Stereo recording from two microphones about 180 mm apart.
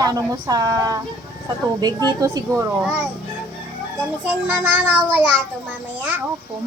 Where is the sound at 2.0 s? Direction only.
20° right (ahead or behind).